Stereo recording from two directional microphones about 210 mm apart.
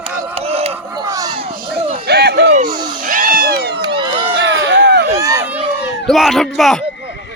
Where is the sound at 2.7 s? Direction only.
20° right (ahead or behind).